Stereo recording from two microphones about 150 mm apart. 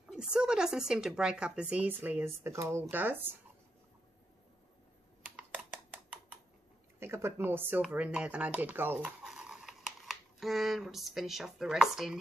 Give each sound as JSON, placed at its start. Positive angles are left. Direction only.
{"t": 0.1, "sound": "speech", "side_deg": -5}
{"t": 7.0, "sound": "speech", "side_deg": -15}